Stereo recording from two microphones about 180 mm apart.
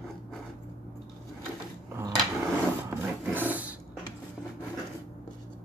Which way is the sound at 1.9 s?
20° right (ahead or behind).